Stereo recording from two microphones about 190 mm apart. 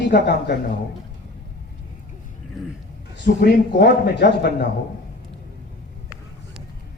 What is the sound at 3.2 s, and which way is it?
A man's voice, 65° left (ahead or behind).